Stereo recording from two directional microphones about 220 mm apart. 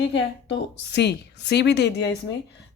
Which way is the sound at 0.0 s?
50° left (ahead or behind).